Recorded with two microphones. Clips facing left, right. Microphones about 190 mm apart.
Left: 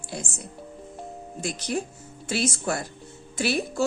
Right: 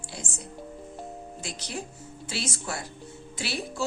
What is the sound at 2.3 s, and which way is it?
A woman's voice, 50° left (ahead or behind).